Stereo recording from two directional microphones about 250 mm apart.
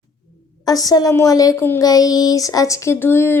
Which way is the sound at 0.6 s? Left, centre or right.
Centre.